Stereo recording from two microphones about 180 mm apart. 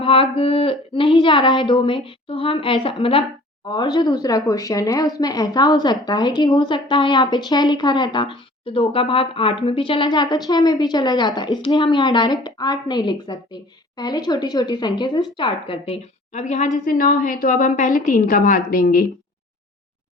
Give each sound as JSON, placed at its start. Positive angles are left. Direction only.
{"t": 0.0, "sound": "a woman's voice", "side_deg": 30}